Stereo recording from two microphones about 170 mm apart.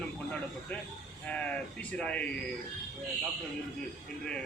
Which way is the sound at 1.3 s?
5° left (ahead or behind).